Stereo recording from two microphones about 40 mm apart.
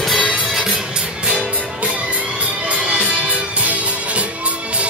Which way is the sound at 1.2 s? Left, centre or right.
Right.